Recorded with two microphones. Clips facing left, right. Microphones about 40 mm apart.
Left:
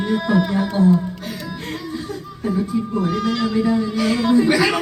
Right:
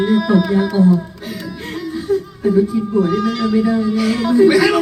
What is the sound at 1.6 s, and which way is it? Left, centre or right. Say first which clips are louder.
Music: right 4 dB; centre.